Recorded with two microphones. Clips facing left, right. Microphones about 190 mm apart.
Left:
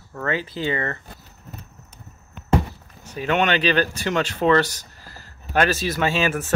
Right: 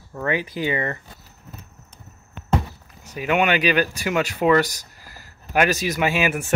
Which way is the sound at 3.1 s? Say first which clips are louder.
Right 1 dB; 10° right (ahead or behind).